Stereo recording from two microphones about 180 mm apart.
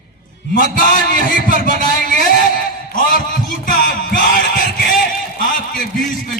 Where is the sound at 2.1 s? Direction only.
50° left (ahead or behind).